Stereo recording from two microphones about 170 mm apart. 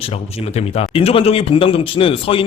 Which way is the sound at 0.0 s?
40° left (ahead or behind).